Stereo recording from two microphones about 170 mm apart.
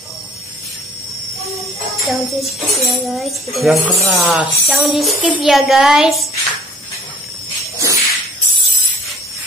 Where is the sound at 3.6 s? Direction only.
Centre (ahead or behind).